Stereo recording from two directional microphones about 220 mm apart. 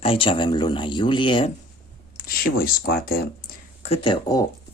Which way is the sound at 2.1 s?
40° left (ahead or behind).